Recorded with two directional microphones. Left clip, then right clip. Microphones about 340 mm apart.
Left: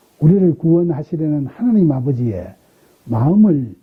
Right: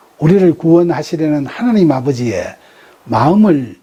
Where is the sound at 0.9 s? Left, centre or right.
Centre.